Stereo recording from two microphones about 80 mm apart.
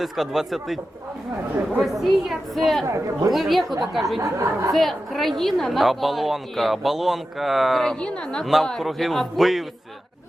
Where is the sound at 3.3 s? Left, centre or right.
Centre.